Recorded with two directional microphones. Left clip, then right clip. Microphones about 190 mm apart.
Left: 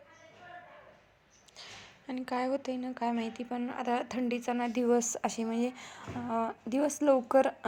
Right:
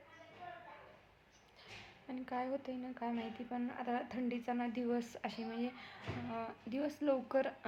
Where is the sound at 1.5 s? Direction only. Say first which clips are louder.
Left 6 dB; 35° left (ahead or behind).